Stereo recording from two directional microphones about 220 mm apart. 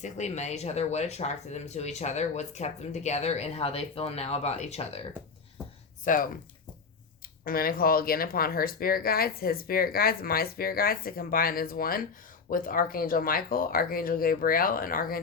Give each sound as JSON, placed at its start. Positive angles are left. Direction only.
{"t": 0.0, "sound": "speech", "side_deg": 30}
{"t": 6.1, "sound": "speech", "side_deg": 35}
{"t": 7.4, "sound": "speech", "side_deg": 40}